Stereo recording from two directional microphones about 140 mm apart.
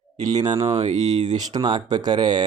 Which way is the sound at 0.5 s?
35° right (ahead or behind).